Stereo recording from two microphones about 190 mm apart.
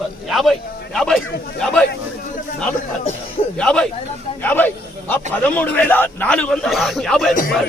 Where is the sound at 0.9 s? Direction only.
Centre (ahead or behind).